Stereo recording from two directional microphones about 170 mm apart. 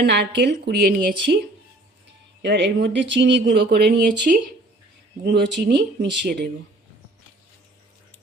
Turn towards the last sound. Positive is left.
turn(degrees=-85)